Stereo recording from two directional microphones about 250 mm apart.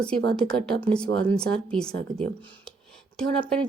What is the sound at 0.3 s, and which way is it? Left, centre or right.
Speech, centre.